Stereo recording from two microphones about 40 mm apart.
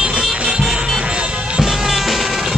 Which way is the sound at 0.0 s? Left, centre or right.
Right.